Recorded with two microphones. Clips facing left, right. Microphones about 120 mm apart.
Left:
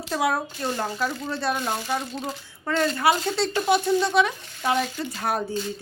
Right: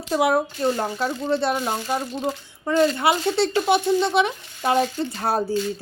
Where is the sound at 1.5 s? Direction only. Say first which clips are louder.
Right 2 dB; 15° right (ahead or behind).